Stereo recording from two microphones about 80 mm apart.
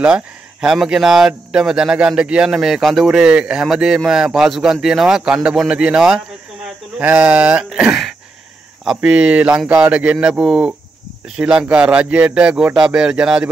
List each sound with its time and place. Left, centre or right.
0.0 s speech: centre